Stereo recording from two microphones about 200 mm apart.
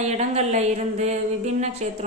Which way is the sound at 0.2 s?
35° right (ahead or behind).